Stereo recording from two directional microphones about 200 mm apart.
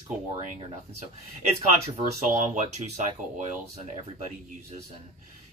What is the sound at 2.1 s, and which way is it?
Speech, 35° right (ahead or behind).